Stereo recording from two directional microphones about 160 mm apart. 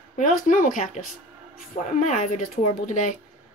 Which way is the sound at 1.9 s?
50° left (ahead or behind).